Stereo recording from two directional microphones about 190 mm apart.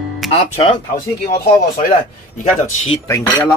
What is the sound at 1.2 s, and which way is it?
Speech, 45° left (ahead or behind).